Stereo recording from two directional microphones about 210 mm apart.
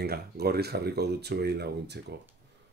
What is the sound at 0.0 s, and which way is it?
Speech, 50° right (ahead or behind).